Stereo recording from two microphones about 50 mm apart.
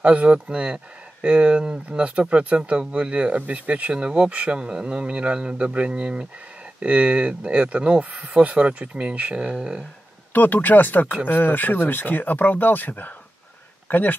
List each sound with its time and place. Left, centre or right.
0.0 s speech: right
10.3 s speech: left